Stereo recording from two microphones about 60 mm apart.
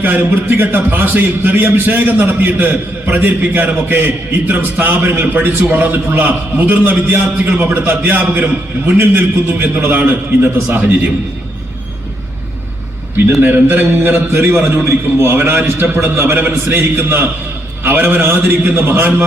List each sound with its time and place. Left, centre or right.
0.0 s a man's voice: right
13.4 s a man's voice: right